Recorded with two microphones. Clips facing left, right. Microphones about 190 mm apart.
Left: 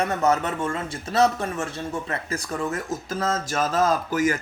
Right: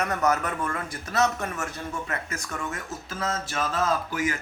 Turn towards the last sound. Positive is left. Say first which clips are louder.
# left 5 dB
turn(degrees=40)  # may be behind; listen again after turning